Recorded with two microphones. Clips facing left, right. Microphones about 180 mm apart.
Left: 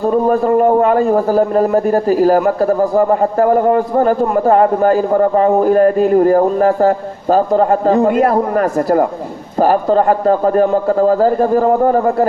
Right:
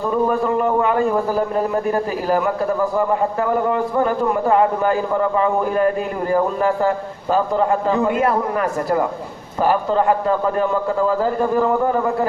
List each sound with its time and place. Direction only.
0.0 s a man's voice: 40° left (ahead or behind)